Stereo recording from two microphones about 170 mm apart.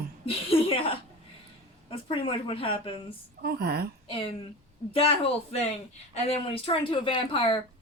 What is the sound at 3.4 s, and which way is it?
Speech, 65° right (ahead or behind).